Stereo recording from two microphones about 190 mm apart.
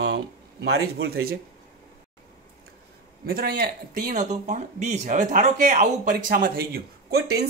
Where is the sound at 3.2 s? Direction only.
50° right (ahead or behind).